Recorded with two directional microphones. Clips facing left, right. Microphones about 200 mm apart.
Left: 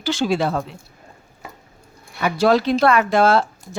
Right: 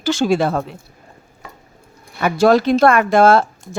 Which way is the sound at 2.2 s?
50° right (ahead or behind).